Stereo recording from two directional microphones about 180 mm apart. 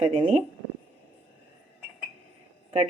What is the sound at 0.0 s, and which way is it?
Speech, 35° right (ahead or behind).